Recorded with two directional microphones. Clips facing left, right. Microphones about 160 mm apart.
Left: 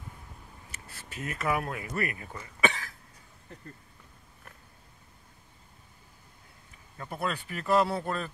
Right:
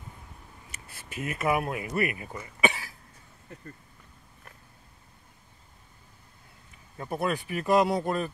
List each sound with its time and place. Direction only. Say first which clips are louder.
0.7 s speech: right 1 dB; 15° right (ahead or behind)
7.0 s speech: right 4 dB; 20° right (ahead or behind)